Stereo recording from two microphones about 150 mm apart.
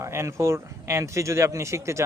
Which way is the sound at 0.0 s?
20° right (ahead or behind).